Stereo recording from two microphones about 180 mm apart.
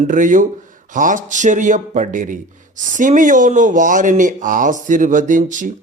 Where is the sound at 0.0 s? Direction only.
45° right (ahead or behind).